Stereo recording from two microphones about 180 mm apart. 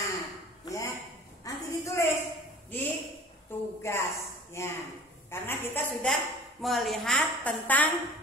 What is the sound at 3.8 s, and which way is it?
A woman's voice, 15° left (ahead or behind).